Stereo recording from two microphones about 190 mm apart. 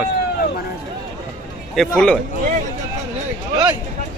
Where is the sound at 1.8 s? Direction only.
5° left (ahead or behind).